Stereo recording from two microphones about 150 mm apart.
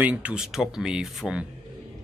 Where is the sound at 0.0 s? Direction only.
10° right (ahead or behind).